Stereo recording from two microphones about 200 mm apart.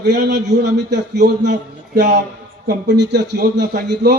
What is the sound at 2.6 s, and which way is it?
A man's voice, 60° right (ahead or behind).